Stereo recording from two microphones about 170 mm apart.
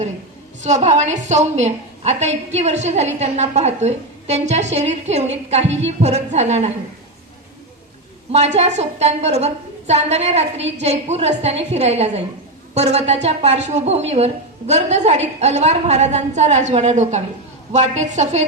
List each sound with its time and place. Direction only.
0.6 s a woman's voice: 40° right (ahead or behind)
8.3 s a woman's voice: 40° right (ahead or behind)